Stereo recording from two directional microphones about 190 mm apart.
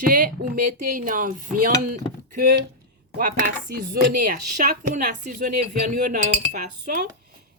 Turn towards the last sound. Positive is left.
turn(degrees=-45)  # may be behind; listen again after turning